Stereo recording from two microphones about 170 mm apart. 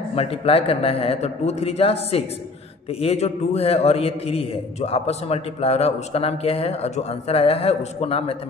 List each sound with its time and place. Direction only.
0.1 s a man's voice: 35° left (ahead or behind)